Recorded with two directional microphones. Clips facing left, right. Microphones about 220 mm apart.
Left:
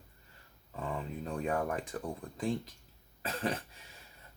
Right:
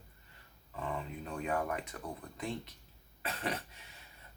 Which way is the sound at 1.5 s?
30° left (ahead or behind).